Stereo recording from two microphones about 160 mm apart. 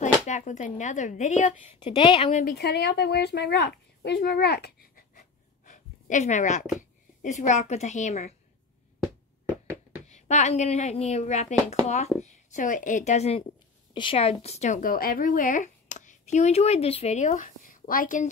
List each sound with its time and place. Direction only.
0.0 s speech: 50° left (ahead or behind)
1.8 s speech: 35° left (ahead or behind)
2.4 s speech: 90° left; by 5.2 s 65° left (ahead or behind)
5.7 s a sound: 50° left (ahead or behind)
6.8 s a woman's voice: 50° left (ahead or behind)
10.0 s a woman's voice: 45° left (ahead or behind)